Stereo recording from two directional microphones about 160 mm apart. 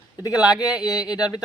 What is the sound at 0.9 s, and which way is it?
Speech, 25° left (ahead or behind).